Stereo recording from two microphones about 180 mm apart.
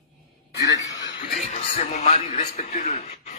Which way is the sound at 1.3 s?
40° left (ahead or behind).